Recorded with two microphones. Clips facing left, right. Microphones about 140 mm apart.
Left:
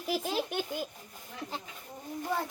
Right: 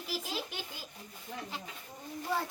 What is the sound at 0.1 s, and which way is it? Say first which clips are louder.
Baby laughter: left 8 dB; 50° left (ahead or behind).